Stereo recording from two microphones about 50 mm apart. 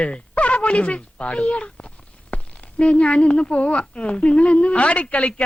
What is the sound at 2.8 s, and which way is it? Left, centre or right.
A woman's voice, left.